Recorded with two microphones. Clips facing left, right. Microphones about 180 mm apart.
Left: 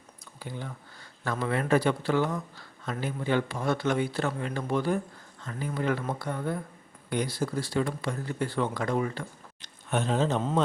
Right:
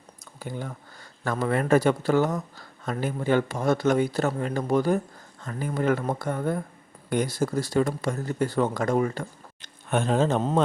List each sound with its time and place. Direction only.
0.3 s speech: 45° right (ahead or behind)